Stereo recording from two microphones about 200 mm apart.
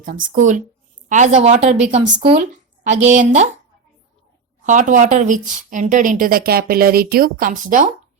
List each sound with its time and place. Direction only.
0.0 s speech: 40° right (ahead or behind)
4.6 s speech: 40° right (ahead or behind)